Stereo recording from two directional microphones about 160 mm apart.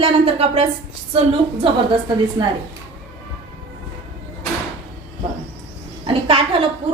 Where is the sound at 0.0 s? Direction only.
40° right (ahead or behind).